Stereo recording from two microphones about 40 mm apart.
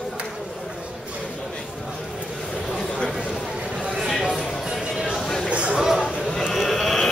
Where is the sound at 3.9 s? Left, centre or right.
Centre.